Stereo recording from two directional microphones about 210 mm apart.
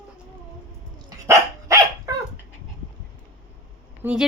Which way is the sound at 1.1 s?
15° right (ahead or behind).